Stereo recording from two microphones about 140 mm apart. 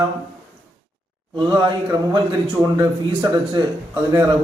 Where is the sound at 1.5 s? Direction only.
35° right (ahead or behind).